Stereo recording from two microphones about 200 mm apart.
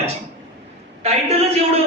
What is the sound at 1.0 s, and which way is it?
Speech, 30° right (ahead or behind).